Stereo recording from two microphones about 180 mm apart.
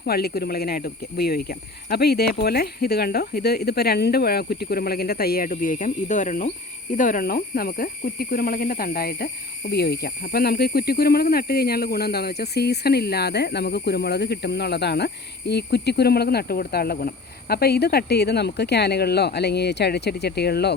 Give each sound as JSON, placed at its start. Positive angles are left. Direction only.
{"t": 0.0, "sound": "speech", "side_deg": 60}